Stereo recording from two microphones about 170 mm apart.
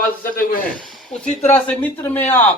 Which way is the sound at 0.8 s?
Centre (ahead or behind).